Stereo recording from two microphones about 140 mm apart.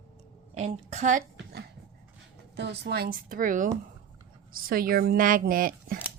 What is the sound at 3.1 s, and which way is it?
Speech, 90° right.